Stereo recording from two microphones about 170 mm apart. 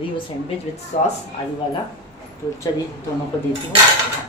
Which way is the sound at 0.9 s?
45° left (ahead or behind).